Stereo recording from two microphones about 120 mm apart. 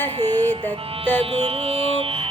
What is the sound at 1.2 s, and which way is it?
Mantra, 55° right (ahead or behind).